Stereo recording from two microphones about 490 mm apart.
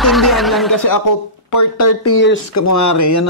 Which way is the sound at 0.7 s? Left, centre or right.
Left.